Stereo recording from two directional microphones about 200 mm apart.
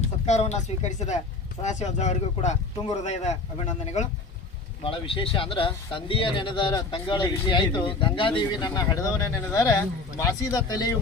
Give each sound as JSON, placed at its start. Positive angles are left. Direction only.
{"t": 0.3, "sound": "a man's voice", "side_deg": 35}